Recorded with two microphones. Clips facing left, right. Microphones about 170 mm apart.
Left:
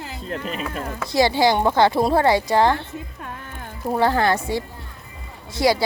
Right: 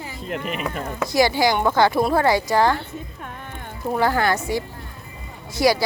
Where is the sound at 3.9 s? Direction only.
25° left (ahead or behind).